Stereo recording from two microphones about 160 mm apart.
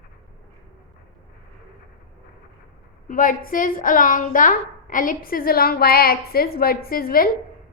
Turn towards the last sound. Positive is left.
turn(degrees=65)  # may be behind; listen again after turning